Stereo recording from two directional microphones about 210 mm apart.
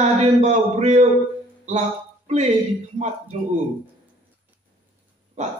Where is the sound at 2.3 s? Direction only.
30° right (ahead or behind).